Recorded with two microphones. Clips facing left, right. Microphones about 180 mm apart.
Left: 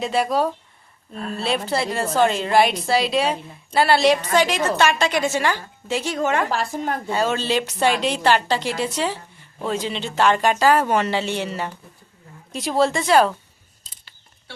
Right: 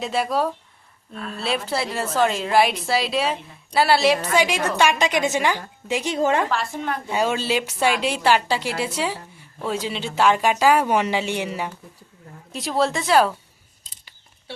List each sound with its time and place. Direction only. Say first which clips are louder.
0.0 s a woman's voice: left 2 dB; centre (ahead or behind)
1.1 s a woman's voice: left 3 dB; 40° left (ahead or behind)
1.4 s a woman's voice: left 2 dB; centre (ahead or behind)
6.1 s a woman's voice: right 2 dB; 30° right (ahead or behind)
6.5 s a woman's voice: left 1 dB; 40° left (ahead or behind)
7.1 s a woman's voice: even; 10° right (ahead or behind)
12.5 s a woman's voice: left 2 dB; centre (ahead or behind)